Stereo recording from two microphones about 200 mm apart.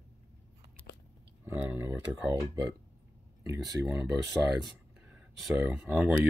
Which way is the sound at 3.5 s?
15° right (ahead or behind).